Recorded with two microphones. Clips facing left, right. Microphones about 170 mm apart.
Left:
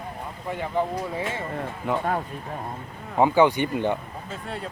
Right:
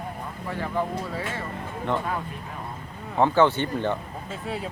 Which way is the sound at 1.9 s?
5° left (ahead or behind).